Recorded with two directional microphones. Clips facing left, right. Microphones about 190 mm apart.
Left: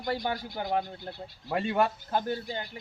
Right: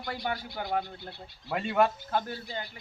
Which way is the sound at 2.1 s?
20° left (ahead or behind).